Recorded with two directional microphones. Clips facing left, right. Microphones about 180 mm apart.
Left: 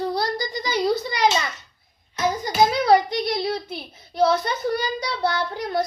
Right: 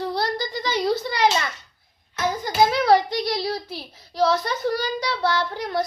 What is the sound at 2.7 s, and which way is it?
A child's voice, 20° left (ahead or behind).